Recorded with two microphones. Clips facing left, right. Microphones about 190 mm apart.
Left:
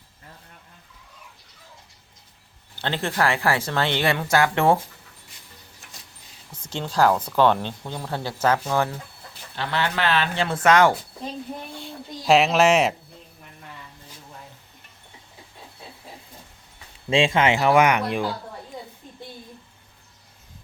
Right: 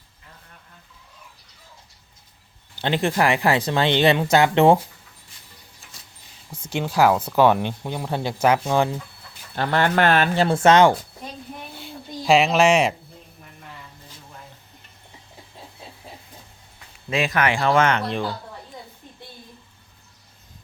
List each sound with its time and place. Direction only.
2.7 s speech: 15° right (ahead or behind)
6.5 s speech: 10° right (ahead or behind)
9.6 s speech: 50° right (ahead or behind); by 10.9 s 25° right (ahead or behind)
11.7 s a sound: centre (ahead or behind)
17.1 s speech: 25° left (ahead or behind); by 18.3 s 10° left (ahead or behind)